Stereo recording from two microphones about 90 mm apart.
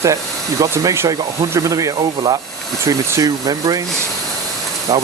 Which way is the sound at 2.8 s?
40° right (ahead or behind).